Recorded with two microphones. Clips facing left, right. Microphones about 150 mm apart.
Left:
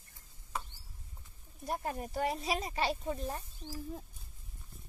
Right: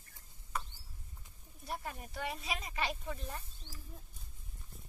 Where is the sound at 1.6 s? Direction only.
45° left (ahead or behind).